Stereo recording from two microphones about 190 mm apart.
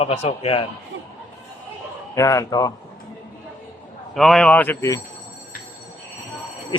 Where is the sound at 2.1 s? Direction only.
15° left (ahead or behind).